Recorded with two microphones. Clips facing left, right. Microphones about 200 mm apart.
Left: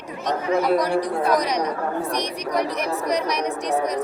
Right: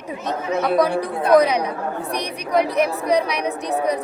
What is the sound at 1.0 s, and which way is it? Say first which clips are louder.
A woman's voice: right 5 dB; 55° right (ahead or behind).